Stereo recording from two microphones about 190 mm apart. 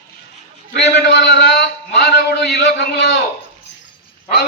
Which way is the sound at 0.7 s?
60° left (ahead or behind).